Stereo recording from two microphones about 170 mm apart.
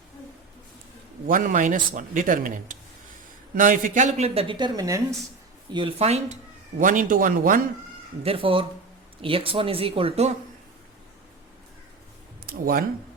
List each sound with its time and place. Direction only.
1.3 s speech: 50° right (ahead or behind); by 5.0 s 20° right (ahead or behind)
5.7 s speech: 35° right (ahead or behind); by 7.6 s 50° right (ahead or behind)
8.2 s speech: 35° right (ahead or behind)